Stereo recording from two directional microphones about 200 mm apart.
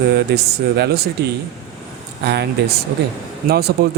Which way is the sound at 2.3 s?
55° right (ahead or behind).